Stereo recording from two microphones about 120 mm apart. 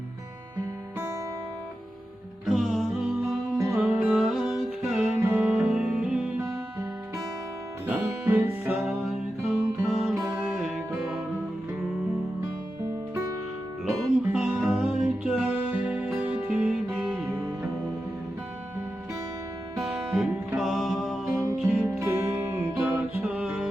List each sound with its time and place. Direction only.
2.5 s music: centre (ahead or behind)
5.1 s music: 15° right (ahead or behind)
8.0 s music: 20° right (ahead or behind); by 11.2 s centre (ahead or behind)
14.0 s music: 5° right (ahead or behind)
19.8 s music: 5° right (ahead or behind)
22.0 s music: 20° right (ahead or behind)
23.2 s music: 5° right (ahead or behind)